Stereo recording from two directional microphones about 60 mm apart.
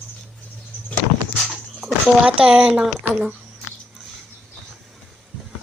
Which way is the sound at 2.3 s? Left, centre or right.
Centre.